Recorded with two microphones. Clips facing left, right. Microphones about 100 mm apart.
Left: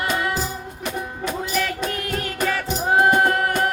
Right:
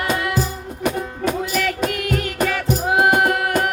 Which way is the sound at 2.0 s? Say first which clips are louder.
Right 4 dB; 30° left (ahead or behind).